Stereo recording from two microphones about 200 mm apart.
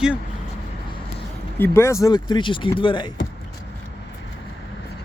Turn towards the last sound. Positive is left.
turn(degrees=25)  # may be behind; listen again after turning